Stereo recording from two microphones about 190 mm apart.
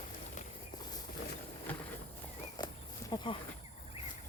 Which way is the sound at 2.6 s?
25° left (ahead or behind).